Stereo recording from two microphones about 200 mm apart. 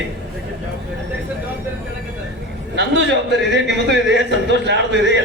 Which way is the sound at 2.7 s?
60° right (ahead or behind).